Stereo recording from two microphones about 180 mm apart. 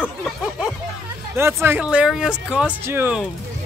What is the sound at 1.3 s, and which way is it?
Speech, 15° right (ahead or behind).